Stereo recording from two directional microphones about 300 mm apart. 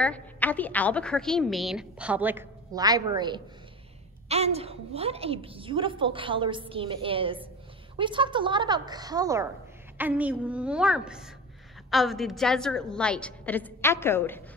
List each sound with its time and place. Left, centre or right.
0.0 s a woman's voice: centre